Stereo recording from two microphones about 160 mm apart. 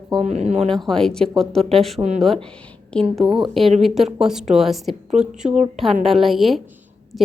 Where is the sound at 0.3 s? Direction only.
45° right (ahead or behind).